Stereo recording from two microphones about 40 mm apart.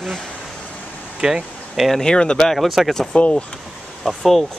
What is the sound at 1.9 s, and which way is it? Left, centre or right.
Speech, centre.